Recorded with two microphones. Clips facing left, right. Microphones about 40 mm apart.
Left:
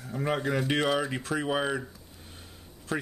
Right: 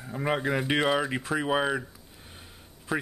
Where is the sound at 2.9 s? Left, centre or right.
Centre.